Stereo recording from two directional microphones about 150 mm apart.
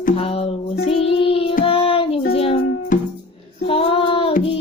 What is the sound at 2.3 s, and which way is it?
Music, 40° left (ahead or behind).